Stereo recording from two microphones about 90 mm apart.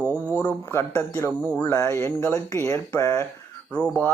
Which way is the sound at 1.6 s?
25° left (ahead or behind).